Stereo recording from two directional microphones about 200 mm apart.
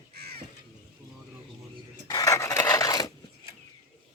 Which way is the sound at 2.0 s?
15° left (ahead or behind).